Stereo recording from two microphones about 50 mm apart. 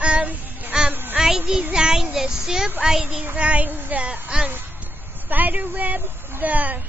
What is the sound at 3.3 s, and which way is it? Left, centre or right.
A woman's voice, right.